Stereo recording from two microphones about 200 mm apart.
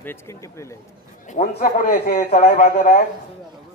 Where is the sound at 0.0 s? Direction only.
15° left (ahead or behind).